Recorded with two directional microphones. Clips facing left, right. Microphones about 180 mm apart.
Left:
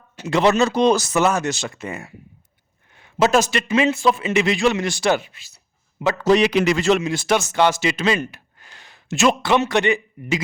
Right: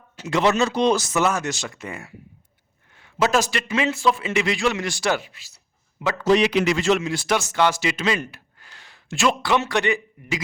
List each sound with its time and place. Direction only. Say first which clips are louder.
0.3 s speech: left 3 dB; 35° left (ahead or behind)
1.1 s a man's voice: left 3 dB; 25° left (ahead or behind)
6.2 s a man's voice: left 2 dB; 45° left (ahead or behind)
7.0 s speech: left 3 dB; 20° left (ahead or behind)